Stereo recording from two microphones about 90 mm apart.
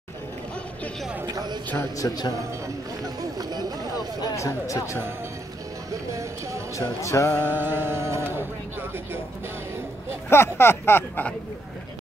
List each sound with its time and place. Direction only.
1.2 s speech: 50° right (ahead or behind)
2.0 s speech: 45° left (ahead or behind)
3.2 s chatter: 50° right (ahead or behind)
4.4 s speech: 35° left (ahead or behind)
5.9 s speech: 35° right (ahead or behind)
7.0 s speech: 35° left (ahead or behind)
7.4 s music: 25° right (ahead or behind)
10.3 s speech: 25° left (ahead or behind)